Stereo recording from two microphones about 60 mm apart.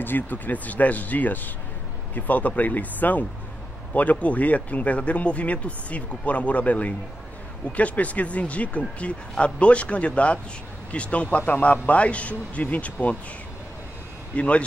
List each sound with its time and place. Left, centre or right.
0.0 s speech: left
14.3 s speech: left